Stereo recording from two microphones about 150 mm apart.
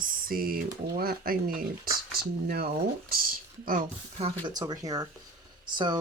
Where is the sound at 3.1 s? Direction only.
75° right (ahead or behind).